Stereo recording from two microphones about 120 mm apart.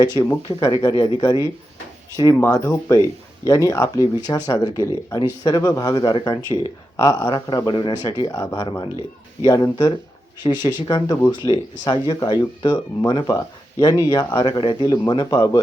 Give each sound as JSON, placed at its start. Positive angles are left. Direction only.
{"t": 0.0, "sound": "speech", "side_deg": 35}
{"t": 2.4, "sound": "speech", "side_deg": 25}
{"t": 6.9, "sound": "speech", "side_deg": 30}